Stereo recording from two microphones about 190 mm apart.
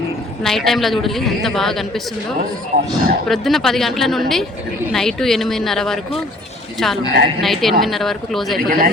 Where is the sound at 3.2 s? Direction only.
Centre (ahead or behind).